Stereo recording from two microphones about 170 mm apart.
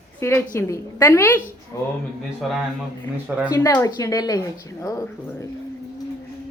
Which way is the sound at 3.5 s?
15° left (ahead or behind).